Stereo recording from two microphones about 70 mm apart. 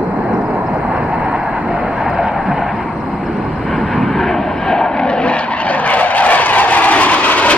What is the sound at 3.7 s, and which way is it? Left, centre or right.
Vehicle, centre.